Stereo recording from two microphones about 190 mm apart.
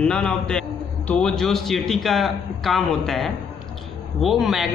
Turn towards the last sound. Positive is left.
turn(degrees=0)  # may be behind; listen again after turning